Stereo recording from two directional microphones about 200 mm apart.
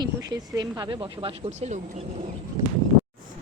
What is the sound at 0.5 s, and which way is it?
Speech, 20° right (ahead or behind).